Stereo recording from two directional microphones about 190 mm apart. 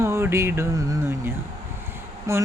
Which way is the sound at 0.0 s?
15° right (ahead or behind).